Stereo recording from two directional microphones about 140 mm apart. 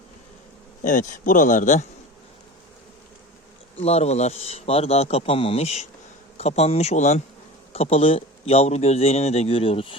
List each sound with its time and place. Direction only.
0.8 s speech: 65° left (ahead or behind)
3.8 s a man's voice: 50° left (ahead or behind)